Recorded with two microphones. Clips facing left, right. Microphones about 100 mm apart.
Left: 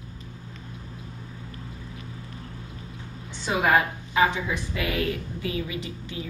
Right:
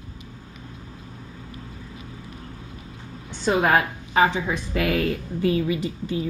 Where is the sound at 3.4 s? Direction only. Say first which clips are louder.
Right 2 dB; 45° right (ahead or behind).